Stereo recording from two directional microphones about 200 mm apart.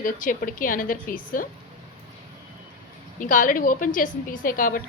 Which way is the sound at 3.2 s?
40° left (ahead or behind).